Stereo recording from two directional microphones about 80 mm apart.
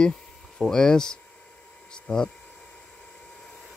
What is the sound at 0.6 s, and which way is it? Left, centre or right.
Speech, centre.